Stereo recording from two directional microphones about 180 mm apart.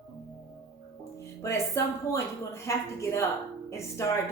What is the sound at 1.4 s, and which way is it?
Speech, 15° left (ahead or behind).